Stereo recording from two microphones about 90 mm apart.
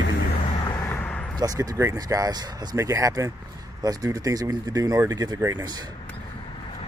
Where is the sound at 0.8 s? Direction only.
25° left (ahead or behind).